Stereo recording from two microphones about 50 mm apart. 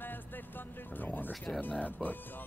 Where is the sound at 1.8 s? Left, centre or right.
Left.